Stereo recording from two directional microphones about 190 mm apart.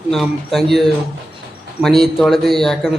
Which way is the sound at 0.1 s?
Centre (ahead or behind).